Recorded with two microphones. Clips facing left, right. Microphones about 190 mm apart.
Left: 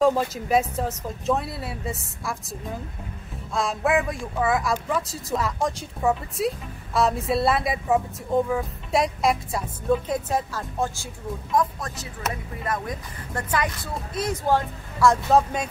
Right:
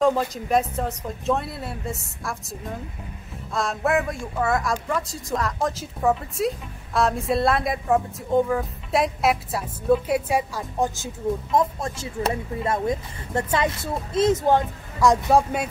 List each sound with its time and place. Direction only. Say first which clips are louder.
0.0 s speech: even; 5° left (ahead or behind); by 11.1 s 15° right (ahead or behind)
11.5 s speech: left 1 dB; 25° right (ahead or behind); by 15.7 s 10° right (ahead or behind)